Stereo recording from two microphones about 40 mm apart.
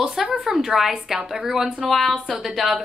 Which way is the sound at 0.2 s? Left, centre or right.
Right.